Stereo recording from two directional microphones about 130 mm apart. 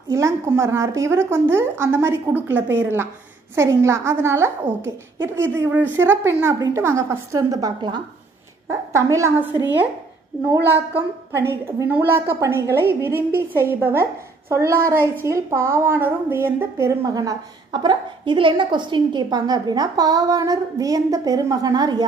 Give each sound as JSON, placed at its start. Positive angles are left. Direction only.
{"t": 0.1, "sound": "a woman's voice", "side_deg": -20}
{"t": 11.3, "sound": "a woman's voice", "side_deg": -20}